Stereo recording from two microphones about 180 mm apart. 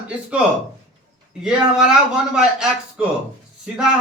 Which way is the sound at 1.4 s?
5° right (ahead or behind).